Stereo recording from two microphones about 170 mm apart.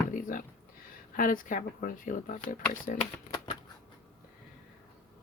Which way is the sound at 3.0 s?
35° left (ahead or behind).